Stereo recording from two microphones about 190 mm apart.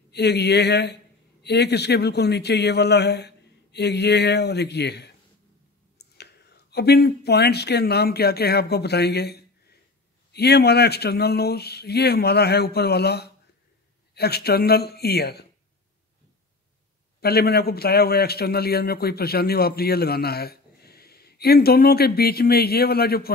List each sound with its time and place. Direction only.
0.1 s a man's voice: 60° left (ahead or behind)
17.2 s a man's voice: 55° left (ahead or behind)